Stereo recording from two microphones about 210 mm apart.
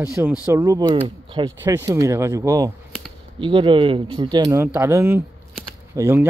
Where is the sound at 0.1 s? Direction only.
10° right (ahead or behind).